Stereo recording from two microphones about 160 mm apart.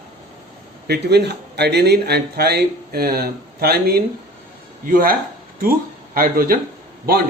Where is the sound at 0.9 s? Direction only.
90° right; by 4.0 s 75° right (ahead or behind).